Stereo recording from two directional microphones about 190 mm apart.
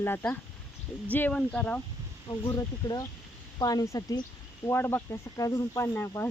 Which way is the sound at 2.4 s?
20° left (ahead or behind).